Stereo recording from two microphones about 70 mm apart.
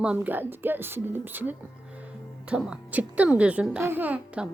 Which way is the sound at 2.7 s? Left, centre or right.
Centre.